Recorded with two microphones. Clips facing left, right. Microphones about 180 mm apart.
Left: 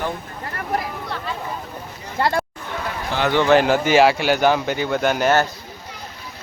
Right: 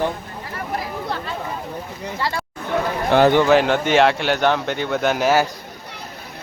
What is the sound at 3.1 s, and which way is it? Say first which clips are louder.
Speech: right 8 dB; 60° right (ahead or behind).